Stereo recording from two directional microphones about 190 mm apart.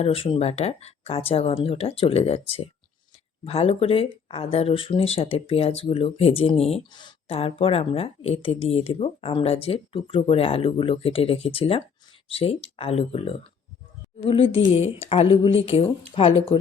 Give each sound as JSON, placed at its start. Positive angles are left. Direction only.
{"t": 0.0, "sound": "speech", "side_deg": 30}